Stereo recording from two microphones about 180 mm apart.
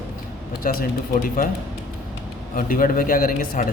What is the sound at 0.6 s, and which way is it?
Speech, 55° left (ahead or behind).